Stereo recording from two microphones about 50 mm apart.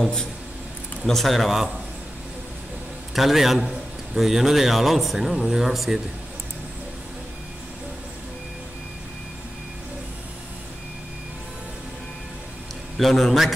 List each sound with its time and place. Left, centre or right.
0.0 s speech: centre
3.2 s speech: centre
12.9 s speech: centre